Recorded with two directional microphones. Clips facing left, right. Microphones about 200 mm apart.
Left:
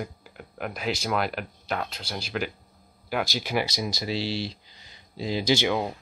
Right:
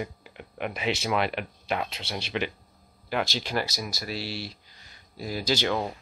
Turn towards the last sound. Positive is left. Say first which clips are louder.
# left 3 dB
turn(degrees=10)  # may be behind; listen again after turning